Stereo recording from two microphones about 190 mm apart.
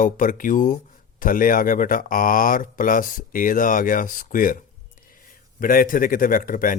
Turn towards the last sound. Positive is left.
turn(degrees=45)  # may be behind; listen again after turning